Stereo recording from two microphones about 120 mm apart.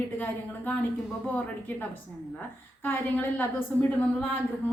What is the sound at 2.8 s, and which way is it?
Speech, 15° left (ahead or behind).